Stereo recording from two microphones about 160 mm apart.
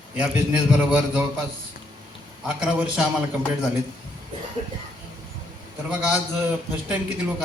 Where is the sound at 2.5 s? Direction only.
5° right (ahead or behind).